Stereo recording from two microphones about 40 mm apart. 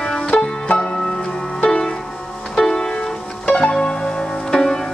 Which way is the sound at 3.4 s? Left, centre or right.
Left.